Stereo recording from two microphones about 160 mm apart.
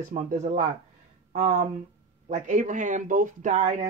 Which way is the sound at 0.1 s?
50° right (ahead or behind).